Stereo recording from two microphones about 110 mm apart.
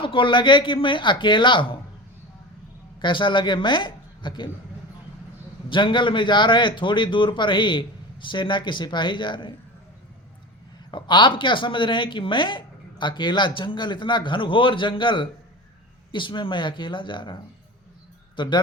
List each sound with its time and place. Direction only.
0.0 s speech: 50° left (ahead or behind)
3.0 s speech: 45° left (ahead or behind)
5.6 s speech: 50° left (ahead or behind)
10.9 s speech: 45° left (ahead or behind)